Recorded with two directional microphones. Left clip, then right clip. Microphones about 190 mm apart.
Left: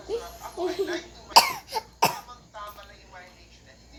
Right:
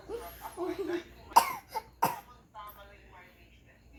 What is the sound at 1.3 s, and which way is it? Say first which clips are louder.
Cough: left 6 dB; 10° right (ahead or behind).